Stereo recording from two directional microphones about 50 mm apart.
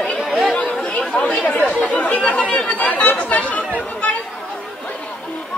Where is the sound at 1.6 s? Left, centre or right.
Left.